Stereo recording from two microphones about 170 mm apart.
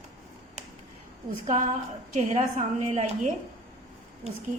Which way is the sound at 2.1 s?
45° right (ahead or behind).